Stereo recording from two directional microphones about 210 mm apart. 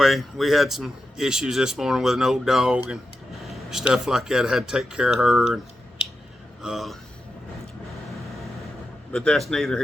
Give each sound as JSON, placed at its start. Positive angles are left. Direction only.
{"t": 0.0, "sound": "speech", "side_deg": 0}
{"t": 6.6, "sound": "speech", "side_deg": 0}
{"t": 9.1, "sound": "speech", "side_deg": 5}